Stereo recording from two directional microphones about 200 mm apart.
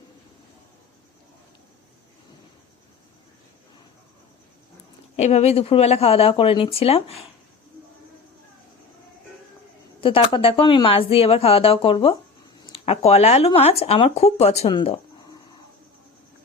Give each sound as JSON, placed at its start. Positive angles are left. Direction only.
{"t": 5.1, "sound": "speech", "side_deg": 35}
{"t": 10.0, "sound": "speech", "side_deg": 25}